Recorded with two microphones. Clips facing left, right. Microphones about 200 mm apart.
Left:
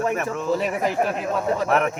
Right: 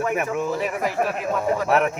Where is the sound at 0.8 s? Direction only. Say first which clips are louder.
Left 1 dB; 25° left (ahead or behind).